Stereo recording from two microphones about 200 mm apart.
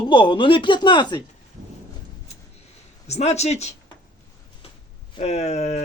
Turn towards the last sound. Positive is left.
turn(degrees=35)  # may be behind; listen again after turning